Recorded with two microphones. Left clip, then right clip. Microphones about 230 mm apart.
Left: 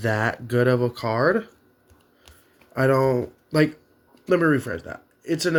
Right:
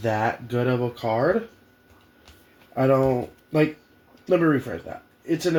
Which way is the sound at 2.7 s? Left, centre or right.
Left.